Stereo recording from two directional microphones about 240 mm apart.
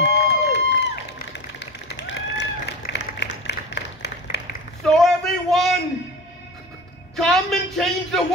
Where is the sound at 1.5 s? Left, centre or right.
Left.